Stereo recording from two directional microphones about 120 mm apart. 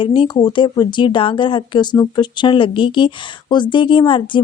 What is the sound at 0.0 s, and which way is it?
A woman's voice, 45° left (ahead or behind).